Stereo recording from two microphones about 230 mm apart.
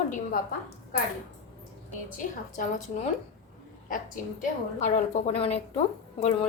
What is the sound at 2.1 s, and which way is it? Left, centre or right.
A woman's voice, left.